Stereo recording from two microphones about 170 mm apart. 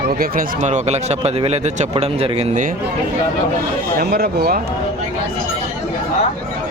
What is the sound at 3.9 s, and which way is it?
Speech, 70° right (ahead or behind).